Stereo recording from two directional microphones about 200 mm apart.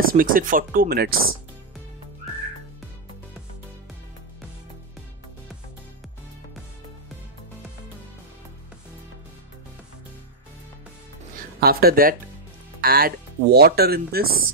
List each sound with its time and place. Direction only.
0.0 s speech: 45° right (ahead or behind)
11.6 s speech: 50° right (ahead or behind)